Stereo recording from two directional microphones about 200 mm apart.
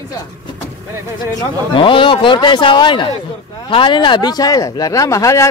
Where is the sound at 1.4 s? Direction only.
25° left (ahead or behind).